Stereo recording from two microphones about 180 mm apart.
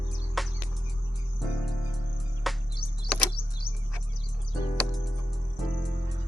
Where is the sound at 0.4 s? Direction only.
Centre (ahead or behind).